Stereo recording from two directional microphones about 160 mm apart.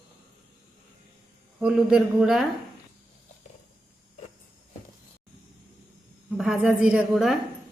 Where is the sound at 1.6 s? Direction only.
5° right (ahead or behind).